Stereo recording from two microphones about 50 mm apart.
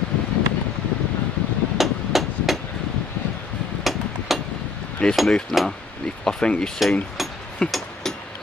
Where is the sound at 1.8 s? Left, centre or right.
Centre.